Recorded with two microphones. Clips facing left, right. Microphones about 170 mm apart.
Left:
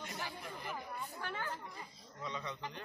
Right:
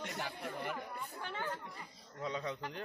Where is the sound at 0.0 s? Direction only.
65° right (ahead or behind).